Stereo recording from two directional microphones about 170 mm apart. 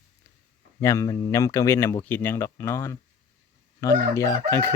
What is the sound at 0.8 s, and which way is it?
Speech, 15° left (ahead or behind).